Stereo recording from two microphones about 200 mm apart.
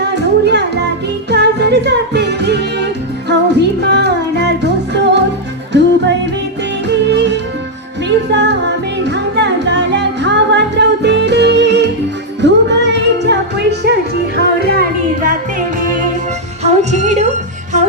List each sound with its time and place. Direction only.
0.2 s music: 60° right (ahead or behind); by 17.2 s 35° right (ahead or behind)